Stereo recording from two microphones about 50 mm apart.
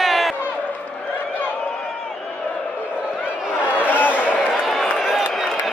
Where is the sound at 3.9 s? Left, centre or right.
Left.